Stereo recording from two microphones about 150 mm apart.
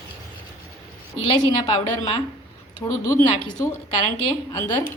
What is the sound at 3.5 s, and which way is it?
Speech, 15° left (ahead or behind).